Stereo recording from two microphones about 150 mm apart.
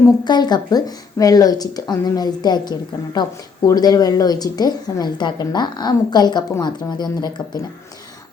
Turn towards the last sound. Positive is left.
turn(degrees=25)  # may be behind; listen again after turning